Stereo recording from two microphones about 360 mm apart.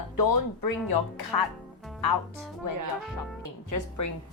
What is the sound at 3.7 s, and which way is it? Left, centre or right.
Speech, left.